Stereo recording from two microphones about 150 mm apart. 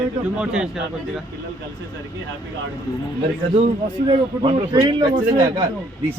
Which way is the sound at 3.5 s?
40° right (ahead or behind).